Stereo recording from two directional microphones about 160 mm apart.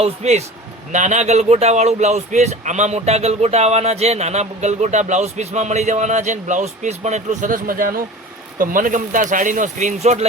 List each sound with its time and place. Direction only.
0.0 s speech: 45° right (ahead or behind)